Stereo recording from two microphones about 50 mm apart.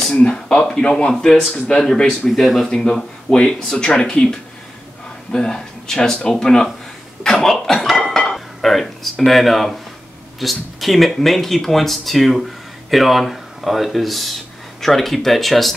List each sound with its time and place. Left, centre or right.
0.2 s speech: centre
2.7 s speech: centre
7.2 s a sound: centre
9.2 s speech: centre